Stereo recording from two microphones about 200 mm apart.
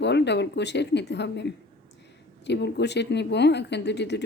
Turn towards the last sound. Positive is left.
turn(degrees=60)  # may be behind; listen again after turning